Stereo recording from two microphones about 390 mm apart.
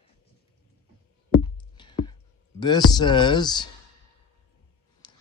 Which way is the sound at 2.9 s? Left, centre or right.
Centre.